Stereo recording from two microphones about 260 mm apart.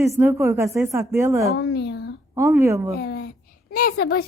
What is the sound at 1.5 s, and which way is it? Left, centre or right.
Speech, left.